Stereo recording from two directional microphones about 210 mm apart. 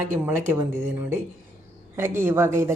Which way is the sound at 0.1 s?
10° right (ahead or behind).